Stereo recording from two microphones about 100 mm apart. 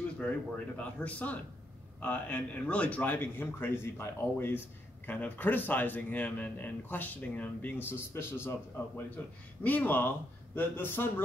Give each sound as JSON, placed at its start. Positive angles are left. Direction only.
{"t": 0.7, "sound": "speech", "side_deg": 15}